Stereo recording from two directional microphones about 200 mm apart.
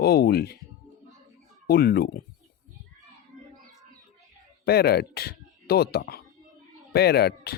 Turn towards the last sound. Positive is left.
turn(degrees=55)  # may be behind; listen again after turning